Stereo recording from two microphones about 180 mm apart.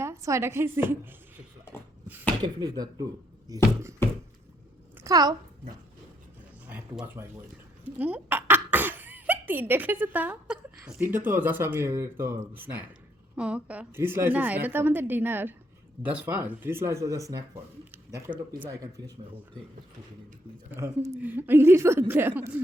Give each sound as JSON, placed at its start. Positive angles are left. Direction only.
{"t": 0.0, "sound": "a woman's voice", "side_deg": -15}
{"t": 2.4, "sound": "speech", "side_deg": -20}
{"t": 5.0, "sound": "speech", "side_deg": -20}
{"t": 6.7, "sound": "speech", "side_deg": -10}
{"t": 18.8, "sound": "speech", "side_deg": -20}
{"t": 20.7, "sound": "speech", "side_deg": -15}